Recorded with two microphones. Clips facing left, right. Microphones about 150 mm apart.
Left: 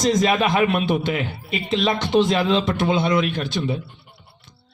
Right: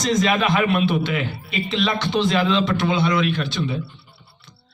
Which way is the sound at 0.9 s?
45° left (ahead or behind).